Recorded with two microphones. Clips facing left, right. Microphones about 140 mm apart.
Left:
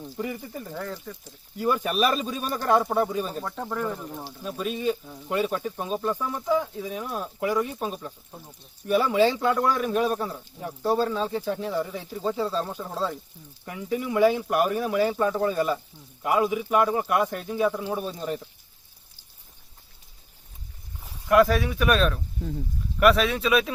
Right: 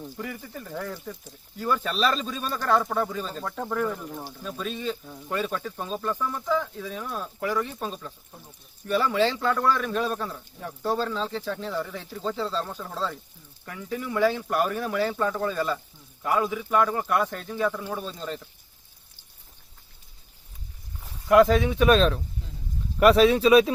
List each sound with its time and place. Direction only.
0.2 s speech: 20° left (ahead or behind)
0.7 s speech: centre (ahead or behind)
1.5 s a man's voice: 15° left (ahead or behind)
3.4 s a man's voice: centre (ahead or behind)
21.5 s speech: 20° right (ahead or behind)